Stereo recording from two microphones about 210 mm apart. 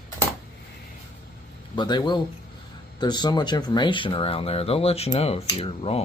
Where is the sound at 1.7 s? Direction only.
20° left (ahead or behind).